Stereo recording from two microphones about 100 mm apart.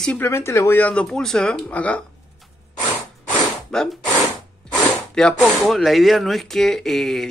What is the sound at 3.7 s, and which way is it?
Speech, 5° left (ahead or behind).